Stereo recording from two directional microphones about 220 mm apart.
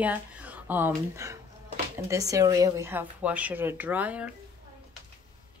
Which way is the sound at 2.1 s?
15° right (ahead or behind).